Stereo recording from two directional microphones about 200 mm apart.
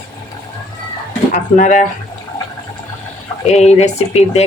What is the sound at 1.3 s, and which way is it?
Speech, 40° left (ahead or behind).